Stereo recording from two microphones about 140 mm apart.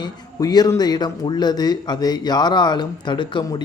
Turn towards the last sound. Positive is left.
turn(degrees=30)  # may be behind; listen again after turning